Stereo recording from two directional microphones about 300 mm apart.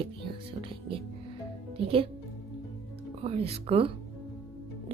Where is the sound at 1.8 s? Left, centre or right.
Centre.